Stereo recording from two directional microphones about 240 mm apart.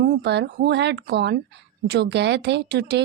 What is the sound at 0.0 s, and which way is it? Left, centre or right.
Speech, right.